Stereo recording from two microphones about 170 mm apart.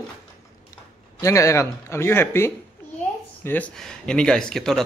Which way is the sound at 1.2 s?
20° left (ahead or behind).